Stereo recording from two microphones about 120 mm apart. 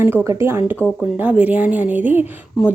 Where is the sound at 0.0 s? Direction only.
20° right (ahead or behind).